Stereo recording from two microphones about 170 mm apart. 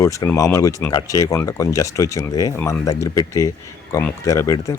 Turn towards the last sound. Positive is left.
turn(degrees=20)  # may be behind; listen again after turning